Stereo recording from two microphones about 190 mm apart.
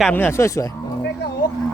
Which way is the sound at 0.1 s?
10° left (ahead or behind).